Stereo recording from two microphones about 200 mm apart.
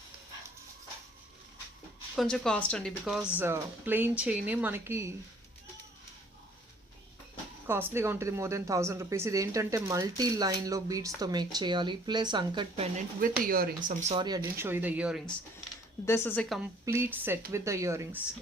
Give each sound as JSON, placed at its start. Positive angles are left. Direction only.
{"t": 2.1, "sound": "speech", "side_deg": 5}
{"t": 7.7, "sound": "speech", "side_deg": -10}
{"t": 13.1, "sound": "speech", "side_deg": -45}
{"t": 14.2, "sound": "speech", "side_deg": -20}
{"t": 16.0, "sound": "speech", "side_deg": 10}
{"t": 16.8, "sound": "speech", "side_deg": -10}